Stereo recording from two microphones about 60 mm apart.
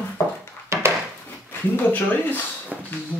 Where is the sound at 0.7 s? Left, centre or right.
Right.